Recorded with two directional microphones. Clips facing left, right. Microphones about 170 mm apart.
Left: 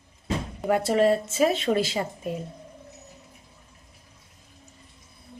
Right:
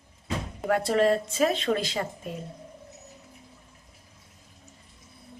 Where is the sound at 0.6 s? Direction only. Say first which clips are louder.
Left 2 dB; 5° left (ahead or behind).